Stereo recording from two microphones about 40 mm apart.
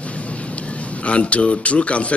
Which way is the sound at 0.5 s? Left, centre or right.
Left.